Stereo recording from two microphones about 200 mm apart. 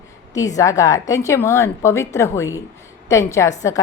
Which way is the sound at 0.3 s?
15° left (ahead or behind).